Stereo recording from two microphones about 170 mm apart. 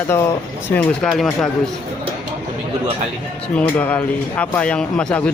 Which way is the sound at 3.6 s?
10° left (ahead or behind).